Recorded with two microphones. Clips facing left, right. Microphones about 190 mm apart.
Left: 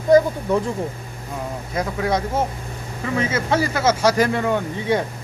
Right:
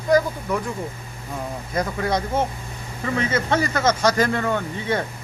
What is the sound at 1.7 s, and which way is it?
Speech, 5° left (ahead or behind).